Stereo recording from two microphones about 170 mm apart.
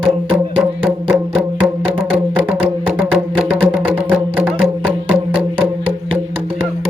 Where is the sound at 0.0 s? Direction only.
30° right (ahead or behind).